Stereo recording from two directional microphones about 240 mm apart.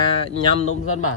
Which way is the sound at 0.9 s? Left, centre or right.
Left.